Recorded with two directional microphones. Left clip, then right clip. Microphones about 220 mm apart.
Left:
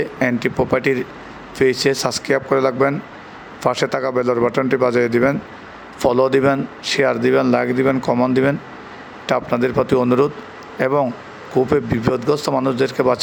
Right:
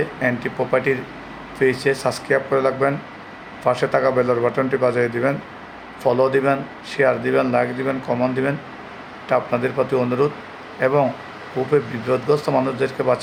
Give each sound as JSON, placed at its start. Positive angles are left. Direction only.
{"t": 0.2, "sound": "speech", "side_deg": 35}
{"t": 11.6, "sound": "speech", "side_deg": 65}
{"t": 12.1, "sound": "speech", "side_deg": 35}